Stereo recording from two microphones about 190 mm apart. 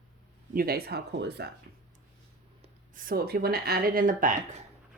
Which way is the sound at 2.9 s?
50° right (ahead or behind).